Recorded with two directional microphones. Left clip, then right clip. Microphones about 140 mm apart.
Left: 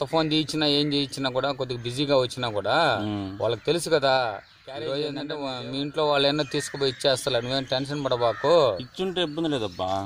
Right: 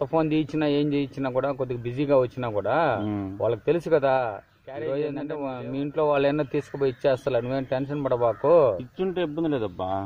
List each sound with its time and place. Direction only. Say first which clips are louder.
0.0 s a man's voice: even; 5° left (ahead or behind)
9.0 s speech: even; 20° left (ahead or behind)